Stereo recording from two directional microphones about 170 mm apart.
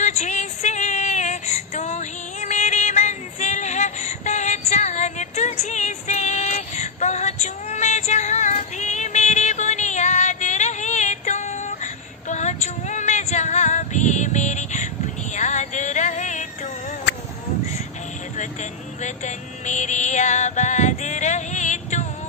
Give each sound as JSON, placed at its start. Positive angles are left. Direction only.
{"t": 0.0, "sound": "female singing", "side_deg": 45}
{"t": 15.3, "sound": "a sound", "side_deg": 45}
{"t": 18.4, "sound": "music", "side_deg": 45}